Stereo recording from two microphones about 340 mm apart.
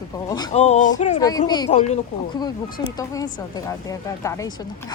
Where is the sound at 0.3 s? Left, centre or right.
Centre.